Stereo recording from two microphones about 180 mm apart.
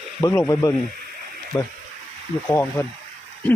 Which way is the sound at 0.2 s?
15° left (ahead or behind).